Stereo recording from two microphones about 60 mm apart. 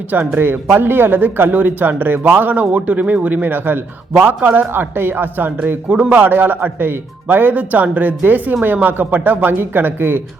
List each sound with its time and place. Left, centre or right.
0.3 s speech: right